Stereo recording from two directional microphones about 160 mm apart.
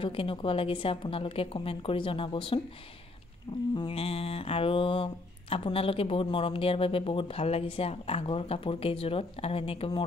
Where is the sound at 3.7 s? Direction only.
30° left (ahead or behind).